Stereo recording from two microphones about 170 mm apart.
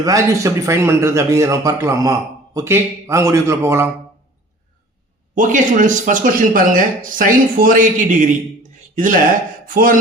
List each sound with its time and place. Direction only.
0.0 s speech: 20° right (ahead or behind)
5.3 s speech: 50° right (ahead or behind)
9.6 s speech: 55° right (ahead or behind)